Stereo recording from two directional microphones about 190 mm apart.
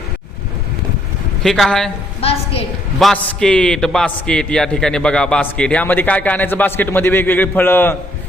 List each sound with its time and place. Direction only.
1.4 s speech: centre (ahead or behind)
2.2 s a woman's voice: 30° left (ahead or behind)
3.0 s a man's voice: 5° left (ahead or behind)